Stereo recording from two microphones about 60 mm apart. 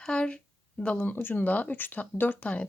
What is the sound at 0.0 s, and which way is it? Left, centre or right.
Speech, centre.